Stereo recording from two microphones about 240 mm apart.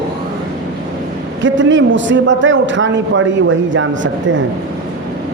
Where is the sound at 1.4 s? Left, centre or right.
Right.